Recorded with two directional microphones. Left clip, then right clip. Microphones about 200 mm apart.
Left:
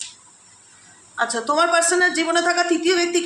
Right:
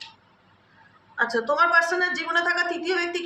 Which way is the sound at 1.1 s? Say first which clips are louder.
Left 3 dB; 50° left (ahead or behind).